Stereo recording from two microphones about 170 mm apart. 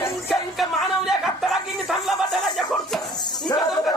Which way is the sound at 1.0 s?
Centre (ahead or behind).